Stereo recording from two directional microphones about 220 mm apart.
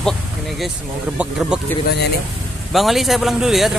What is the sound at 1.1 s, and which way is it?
Speech, 5° right (ahead or behind).